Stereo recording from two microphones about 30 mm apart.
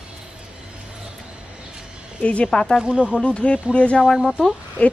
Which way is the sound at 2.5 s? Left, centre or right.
Left.